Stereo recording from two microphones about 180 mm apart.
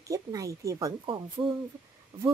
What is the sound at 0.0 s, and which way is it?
A woman's voice, 20° right (ahead or behind).